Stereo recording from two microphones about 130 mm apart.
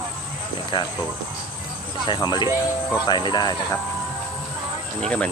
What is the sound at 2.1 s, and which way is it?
Speech, 35° left (ahead or behind).